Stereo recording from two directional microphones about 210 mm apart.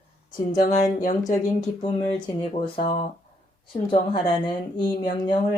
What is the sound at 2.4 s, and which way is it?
Speech, 25° left (ahead or behind).